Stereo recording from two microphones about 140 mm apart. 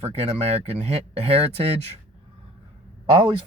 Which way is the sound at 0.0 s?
45° right (ahead or behind).